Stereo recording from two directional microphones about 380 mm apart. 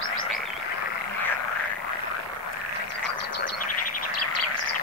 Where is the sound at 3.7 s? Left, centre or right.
Left.